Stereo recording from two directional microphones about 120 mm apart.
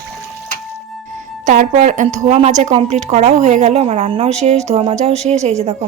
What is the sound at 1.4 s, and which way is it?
Speech, 90° right.